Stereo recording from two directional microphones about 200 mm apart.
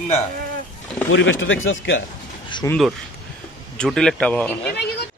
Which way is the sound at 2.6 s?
15° left (ahead or behind).